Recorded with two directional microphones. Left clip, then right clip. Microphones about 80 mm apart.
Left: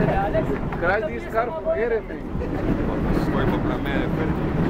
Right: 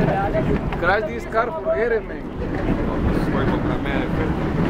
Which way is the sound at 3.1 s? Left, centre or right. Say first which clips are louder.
Right 1 dB; centre.